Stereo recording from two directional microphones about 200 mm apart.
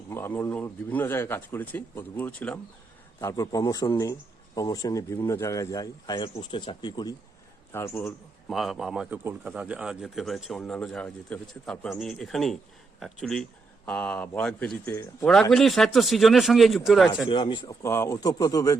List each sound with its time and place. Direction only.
0.1 s speech: 10° left (ahead or behind)
8.4 s speech: centre (ahead or behind)
17.2 s speech: 25° left (ahead or behind)